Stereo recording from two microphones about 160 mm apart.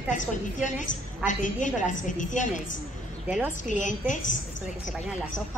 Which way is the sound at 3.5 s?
50° left (ahead or behind).